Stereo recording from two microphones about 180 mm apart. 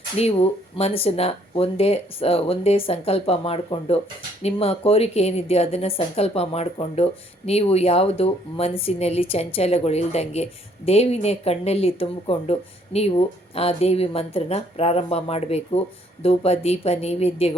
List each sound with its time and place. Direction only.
0.2 s speech: 35° left (ahead or behind)